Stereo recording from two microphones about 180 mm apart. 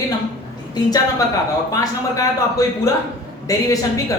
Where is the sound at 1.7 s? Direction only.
20° left (ahead or behind).